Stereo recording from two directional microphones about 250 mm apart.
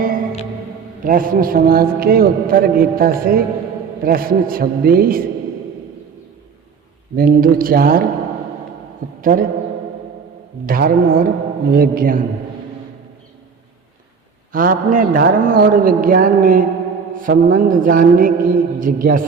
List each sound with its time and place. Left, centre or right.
1.0 s a man's voice: right
7.2 s a man's voice: right
9.2 s a man's voice: right
10.7 s a man's voice: right
14.5 s a man's voice: right